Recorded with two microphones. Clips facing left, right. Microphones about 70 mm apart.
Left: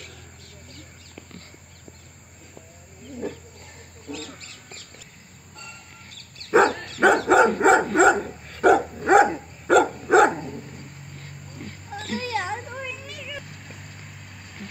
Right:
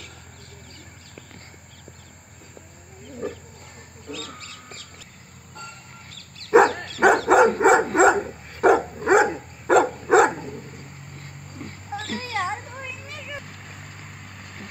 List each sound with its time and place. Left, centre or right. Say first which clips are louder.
6.5 s dog: right 2 dB; centre
12.2 s a sound: even; right
13.0 s vehicle: right 1 dB; right